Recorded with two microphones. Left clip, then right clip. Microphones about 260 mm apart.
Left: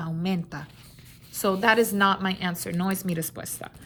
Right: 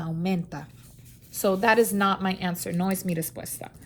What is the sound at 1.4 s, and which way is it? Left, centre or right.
A woman's voice, left.